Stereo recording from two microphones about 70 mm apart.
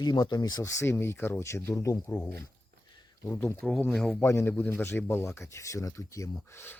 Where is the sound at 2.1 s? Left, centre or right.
Left.